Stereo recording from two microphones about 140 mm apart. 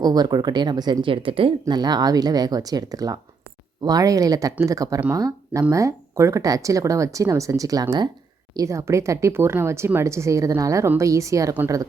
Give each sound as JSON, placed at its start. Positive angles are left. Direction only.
{"t": 0.0, "sound": "speech", "side_deg": -30}
{"t": 1.6, "sound": "speech", "side_deg": -30}